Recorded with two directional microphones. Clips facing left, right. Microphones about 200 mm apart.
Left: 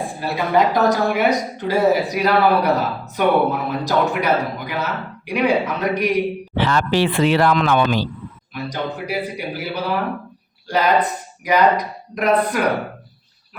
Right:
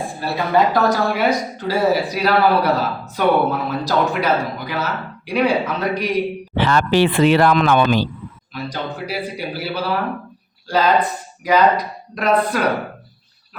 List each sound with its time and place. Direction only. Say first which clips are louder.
0.2 s speech: even; 15° left (ahead or behind)
6.6 s speech: right 2 dB; 60° right (ahead or behind)
8.5 s speech: left 1 dB; 20° left (ahead or behind)